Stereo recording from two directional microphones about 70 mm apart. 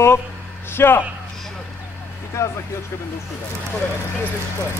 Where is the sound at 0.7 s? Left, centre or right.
Left.